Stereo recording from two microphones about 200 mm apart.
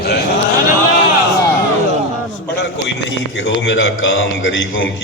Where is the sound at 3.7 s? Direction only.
70° left (ahead or behind).